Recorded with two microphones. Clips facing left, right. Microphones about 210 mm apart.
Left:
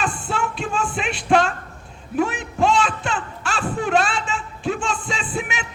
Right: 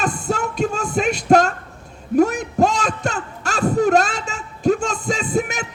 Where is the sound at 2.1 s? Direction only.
40° right (ahead or behind).